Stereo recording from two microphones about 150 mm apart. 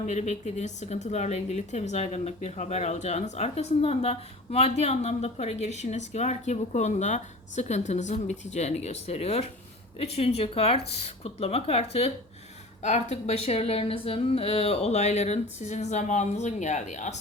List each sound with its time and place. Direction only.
0.0 s a woman's voice: 50° left (ahead or behind)